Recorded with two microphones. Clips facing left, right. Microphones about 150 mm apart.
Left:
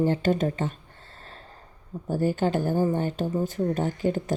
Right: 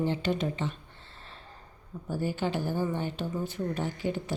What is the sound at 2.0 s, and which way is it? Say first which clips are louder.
Speech: left 6 dB; 45° left (ahead or behind).